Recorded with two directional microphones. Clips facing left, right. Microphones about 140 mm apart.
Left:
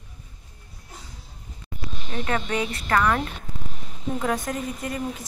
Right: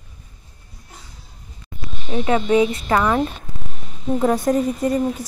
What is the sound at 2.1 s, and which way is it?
A woman's voice, 15° right (ahead or behind).